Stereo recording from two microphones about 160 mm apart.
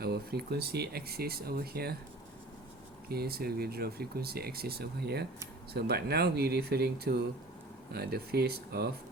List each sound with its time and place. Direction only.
0.0 s speech: 80° right
3.1 s speech: 75° right (ahead or behind)